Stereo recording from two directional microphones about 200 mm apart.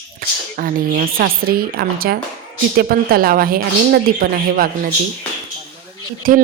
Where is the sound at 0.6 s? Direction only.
45° right (ahead or behind).